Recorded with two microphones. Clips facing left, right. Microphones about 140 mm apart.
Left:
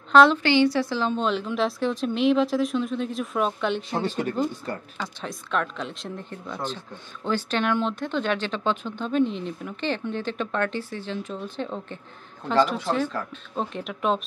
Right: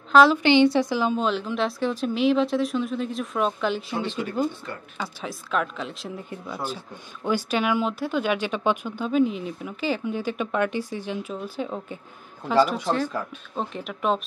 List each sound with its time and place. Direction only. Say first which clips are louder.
0.1 s a woman's voice: even; centre (ahead or behind)
0.4 s speech: right 3 dB; 20° right (ahead or behind); by 3.8 s centre (ahead or behind)
3.9 s speech: left 2 dB; 40° left (ahead or behind)
4.9 s speech: right 1 dB; 5° right (ahead or behind)
13.1 s speech: right 1 dB; 10° right (ahead or behind)
13.6 s speech: left 1 dB; centre (ahead or behind)